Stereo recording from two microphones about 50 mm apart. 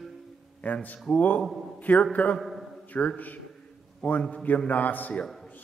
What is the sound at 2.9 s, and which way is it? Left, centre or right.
Speech, left.